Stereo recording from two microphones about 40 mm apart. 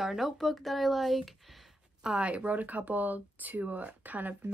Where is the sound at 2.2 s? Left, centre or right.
Right.